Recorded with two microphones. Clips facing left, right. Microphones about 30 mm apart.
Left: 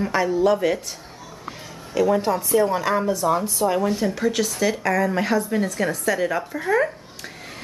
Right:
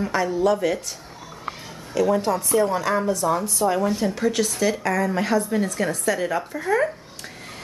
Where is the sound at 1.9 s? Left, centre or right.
Centre.